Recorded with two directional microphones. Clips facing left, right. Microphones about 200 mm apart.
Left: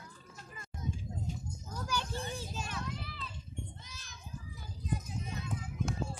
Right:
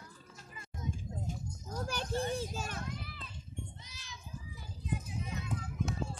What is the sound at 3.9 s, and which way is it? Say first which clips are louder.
Children playing: right 1 dB; 50° left (ahead or behind).